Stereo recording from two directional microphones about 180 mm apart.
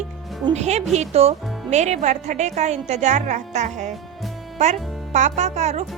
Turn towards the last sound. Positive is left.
turn(degrees=-40)  # may be behind; listen again after turning